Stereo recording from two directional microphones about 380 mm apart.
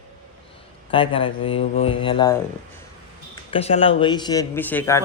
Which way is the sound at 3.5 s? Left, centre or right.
Centre.